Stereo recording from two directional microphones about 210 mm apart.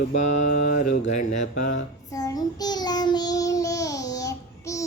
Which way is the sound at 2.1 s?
20° left (ahead or behind).